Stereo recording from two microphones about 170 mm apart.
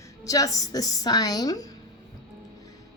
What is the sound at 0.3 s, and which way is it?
A woman's voice, 20° left (ahead or behind).